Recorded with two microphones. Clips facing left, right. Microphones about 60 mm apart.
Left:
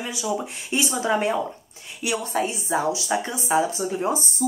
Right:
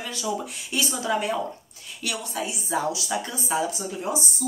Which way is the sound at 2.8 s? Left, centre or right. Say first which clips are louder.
Left 3 dB; left.